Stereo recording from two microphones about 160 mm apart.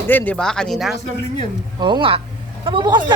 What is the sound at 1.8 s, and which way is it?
Speech, 30° right (ahead or behind).